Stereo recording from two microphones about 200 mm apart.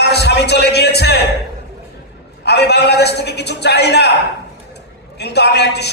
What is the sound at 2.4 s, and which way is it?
A man's voice, 55° left (ahead or behind).